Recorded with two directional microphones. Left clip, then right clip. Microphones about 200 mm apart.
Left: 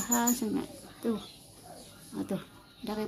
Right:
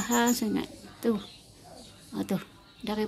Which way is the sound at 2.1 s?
10° right (ahead or behind).